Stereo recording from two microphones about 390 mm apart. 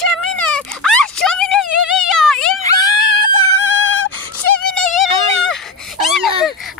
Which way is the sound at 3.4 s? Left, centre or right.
Left.